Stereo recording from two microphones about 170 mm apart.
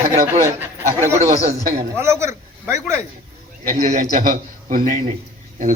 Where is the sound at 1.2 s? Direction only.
40° right (ahead or behind).